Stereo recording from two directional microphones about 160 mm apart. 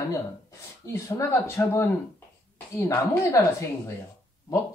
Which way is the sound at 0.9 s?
15° left (ahead or behind).